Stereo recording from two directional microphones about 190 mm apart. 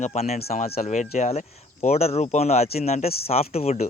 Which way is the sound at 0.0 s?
35° left (ahead or behind).